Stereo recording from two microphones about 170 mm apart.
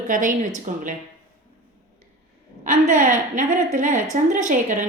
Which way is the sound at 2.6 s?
50° right (ahead or behind).